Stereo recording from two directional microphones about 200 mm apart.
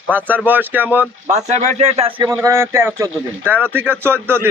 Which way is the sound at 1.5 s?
35° right (ahead or behind).